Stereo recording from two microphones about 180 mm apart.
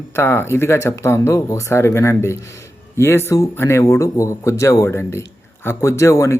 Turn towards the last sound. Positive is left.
turn(degrees=15)  # may be behind; listen again after turning